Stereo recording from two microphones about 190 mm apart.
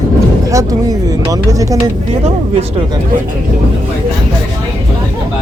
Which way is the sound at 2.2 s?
30° right (ahead or behind).